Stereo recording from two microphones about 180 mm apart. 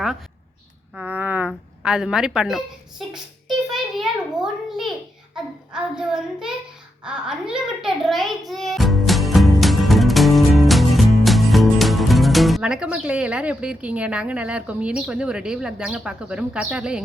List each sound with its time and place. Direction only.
0.9 s a woman's voice: 10° right (ahead or behind)
3.7 s a sound: centre (ahead or behind)
7.0 s a child's voice: 5° right (ahead or behind)